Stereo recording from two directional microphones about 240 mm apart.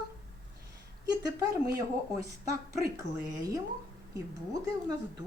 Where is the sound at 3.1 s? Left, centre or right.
Right.